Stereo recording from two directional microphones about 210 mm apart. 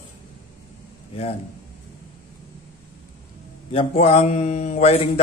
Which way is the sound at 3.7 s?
30° left (ahead or behind).